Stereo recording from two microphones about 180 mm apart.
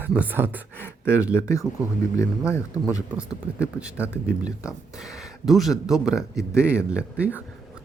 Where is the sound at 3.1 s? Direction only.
5° right (ahead or behind).